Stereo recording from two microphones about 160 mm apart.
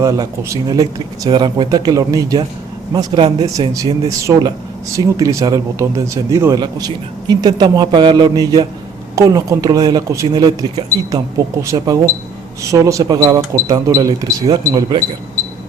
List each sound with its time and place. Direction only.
0.0 s speech: 20° right (ahead or behind)